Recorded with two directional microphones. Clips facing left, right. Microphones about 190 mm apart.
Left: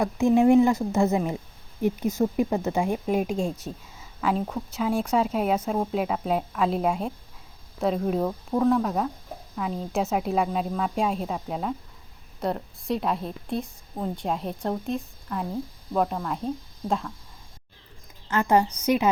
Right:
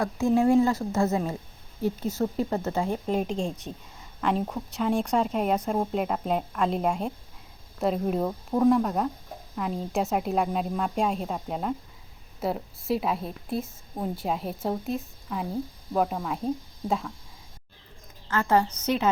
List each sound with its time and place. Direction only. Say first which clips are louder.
0.0 s a woman's voice: left 3 dB; 20° left (ahead or behind); by 16.5 s 5° right (ahead or behind)
18.3 s a woman's voice: left 2 dB; 15° left (ahead or behind)